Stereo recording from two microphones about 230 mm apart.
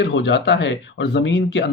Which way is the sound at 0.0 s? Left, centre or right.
Left.